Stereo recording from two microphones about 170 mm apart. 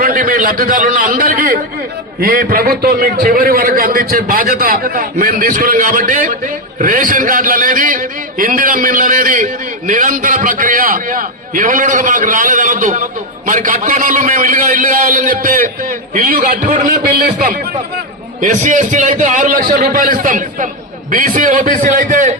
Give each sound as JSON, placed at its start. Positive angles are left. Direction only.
{"t": 0.0, "sound": "a man's voice", "side_deg": -60}
{"t": 18.3, "sound": "a man's voice", "side_deg": -50}